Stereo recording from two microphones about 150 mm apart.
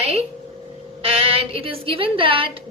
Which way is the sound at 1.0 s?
40° right (ahead or behind).